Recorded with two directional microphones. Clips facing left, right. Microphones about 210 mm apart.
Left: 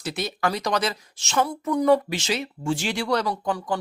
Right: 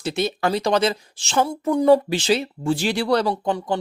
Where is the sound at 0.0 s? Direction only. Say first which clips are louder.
Right 4 dB; 25° right (ahead or behind).